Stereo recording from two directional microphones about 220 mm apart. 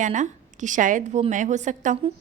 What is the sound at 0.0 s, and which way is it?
Speech, 35° right (ahead or behind).